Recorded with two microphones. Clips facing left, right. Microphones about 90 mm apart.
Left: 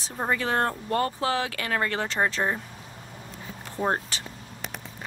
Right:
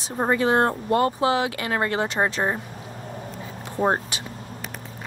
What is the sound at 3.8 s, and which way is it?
Speech, 15° right (ahead or behind).